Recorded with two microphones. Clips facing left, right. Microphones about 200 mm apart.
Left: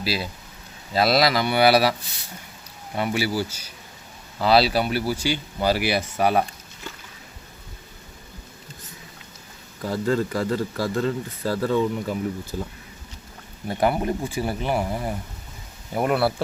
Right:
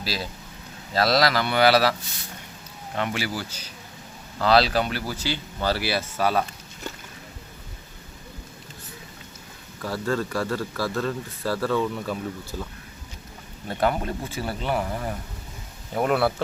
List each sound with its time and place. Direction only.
0.9 s speech: 10° left (ahead or behind)
9.8 s speech: 20° left (ahead or behind)
13.7 s speech: 15° left (ahead or behind)